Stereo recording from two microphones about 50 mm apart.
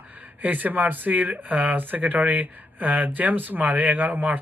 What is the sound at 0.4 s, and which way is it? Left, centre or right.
Speech, right.